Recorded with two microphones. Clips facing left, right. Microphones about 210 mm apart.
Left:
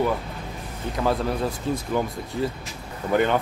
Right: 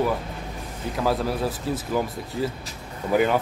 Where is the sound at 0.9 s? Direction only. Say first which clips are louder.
Even; centre (ahead or behind).